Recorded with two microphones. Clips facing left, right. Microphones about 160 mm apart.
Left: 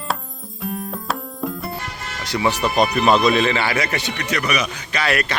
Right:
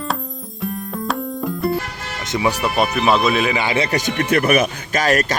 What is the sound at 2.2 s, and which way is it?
Speech, 20° right (ahead or behind).